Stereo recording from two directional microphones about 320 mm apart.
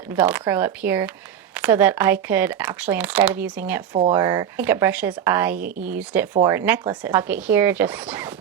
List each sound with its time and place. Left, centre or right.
0.2 s a woman's voice: centre